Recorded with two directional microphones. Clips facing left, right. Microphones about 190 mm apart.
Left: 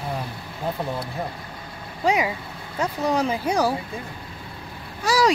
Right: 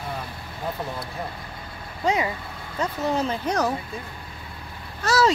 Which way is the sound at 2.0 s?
15° left (ahead or behind).